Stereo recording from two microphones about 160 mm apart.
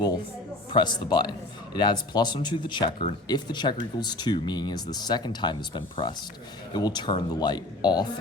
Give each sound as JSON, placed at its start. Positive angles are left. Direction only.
{"t": 0.7, "sound": "a man's voice", "side_deg": 30}